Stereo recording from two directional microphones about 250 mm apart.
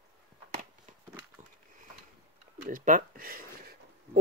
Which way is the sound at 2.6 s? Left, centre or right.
Right.